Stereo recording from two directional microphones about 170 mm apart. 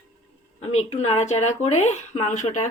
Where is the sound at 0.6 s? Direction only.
40° left (ahead or behind).